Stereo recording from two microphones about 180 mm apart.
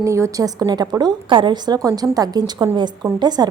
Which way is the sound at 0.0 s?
15° right (ahead or behind).